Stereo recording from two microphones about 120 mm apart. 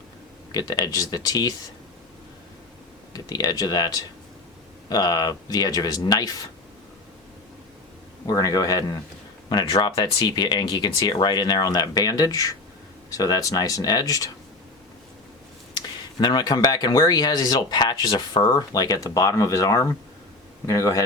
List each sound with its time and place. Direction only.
0.5 s speech: 35° left (ahead or behind)
3.1 s speech: 30° left (ahead or behind)
8.3 s speech: 30° left (ahead or behind)
16.2 s a man's voice: 35° left (ahead or behind)